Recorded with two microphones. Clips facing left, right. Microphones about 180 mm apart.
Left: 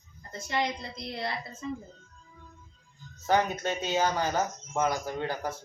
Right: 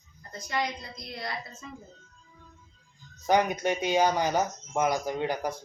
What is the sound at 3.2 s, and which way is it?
Speech, 15° right (ahead or behind).